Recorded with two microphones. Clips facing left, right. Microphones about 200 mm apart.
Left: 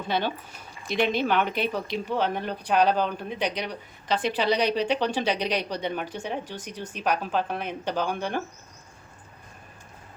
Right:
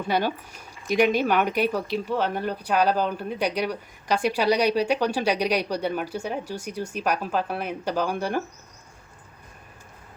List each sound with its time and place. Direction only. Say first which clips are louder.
0.1 s speech: right 2 dB; 10° right (ahead or behind)